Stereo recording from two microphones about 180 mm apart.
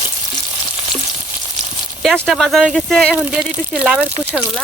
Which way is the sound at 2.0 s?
Centre (ahead or behind).